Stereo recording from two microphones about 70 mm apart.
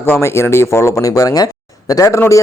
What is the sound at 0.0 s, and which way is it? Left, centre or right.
Speech, left.